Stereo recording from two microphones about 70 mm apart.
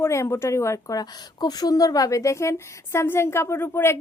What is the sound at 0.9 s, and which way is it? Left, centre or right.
A woman's voice, left.